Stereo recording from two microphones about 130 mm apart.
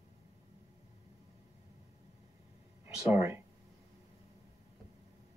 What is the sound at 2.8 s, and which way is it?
Speech, 15° right (ahead or behind).